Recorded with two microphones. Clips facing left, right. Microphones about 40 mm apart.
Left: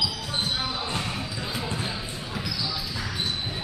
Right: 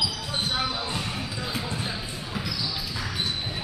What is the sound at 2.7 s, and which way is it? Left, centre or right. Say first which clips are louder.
Basketball bounce: even; centre.